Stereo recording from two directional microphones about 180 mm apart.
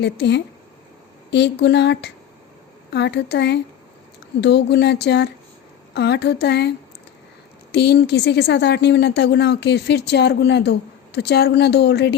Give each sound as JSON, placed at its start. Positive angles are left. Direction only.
{"t": 0.0, "sound": "speech", "side_deg": 70}